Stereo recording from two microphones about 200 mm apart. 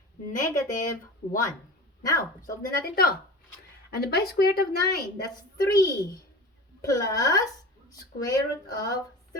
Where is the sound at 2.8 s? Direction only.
50° left (ahead or behind).